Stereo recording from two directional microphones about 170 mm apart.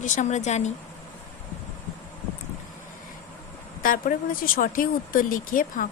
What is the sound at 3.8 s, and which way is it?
A woman's voice, 55° left (ahead or behind).